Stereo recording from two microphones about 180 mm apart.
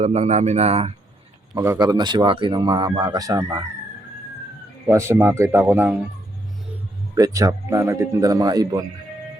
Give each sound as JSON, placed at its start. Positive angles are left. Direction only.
{"t": 0.0, "sound": "speech", "side_deg": -35}
{"t": 1.5, "sound": "speech", "side_deg": -15}
{"t": 4.9, "sound": "a man's voice", "side_deg": -15}
{"t": 7.2, "sound": "speech", "side_deg": -20}